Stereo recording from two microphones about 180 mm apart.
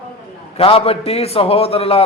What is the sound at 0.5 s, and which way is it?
A man's voice, 30° left (ahead or behind).